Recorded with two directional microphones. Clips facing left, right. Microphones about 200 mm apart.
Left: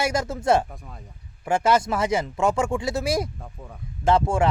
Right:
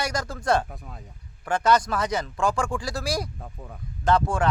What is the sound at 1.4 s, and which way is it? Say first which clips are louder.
Speech: left 1 dB; 25° left (ahead or behind).